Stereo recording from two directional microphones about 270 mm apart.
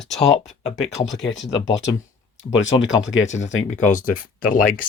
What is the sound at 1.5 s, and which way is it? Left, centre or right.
Speech, centre.